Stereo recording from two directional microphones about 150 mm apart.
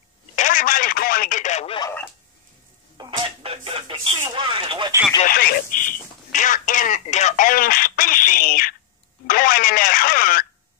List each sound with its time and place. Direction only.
0.4 s telephone: 60° left (ahead or behind)
3.0 s a sound: 35° right (ahead or behind)
4.3 s speech: 35° right (ahead or behind)
5.2 s speech: 80° left
6.3 s speech: 60° left (ahead or behind)